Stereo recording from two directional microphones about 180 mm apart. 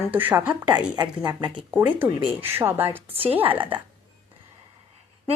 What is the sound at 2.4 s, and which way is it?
Speech, 10° right (ahead or behind).